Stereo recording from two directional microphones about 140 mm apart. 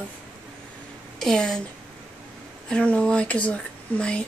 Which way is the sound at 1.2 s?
5° left (ahead or behind).